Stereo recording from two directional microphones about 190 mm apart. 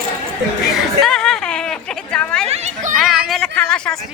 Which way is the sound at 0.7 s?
Centre (ahead or behind).